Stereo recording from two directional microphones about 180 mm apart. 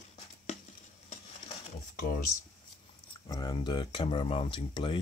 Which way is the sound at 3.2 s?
20° left (ahead or behind).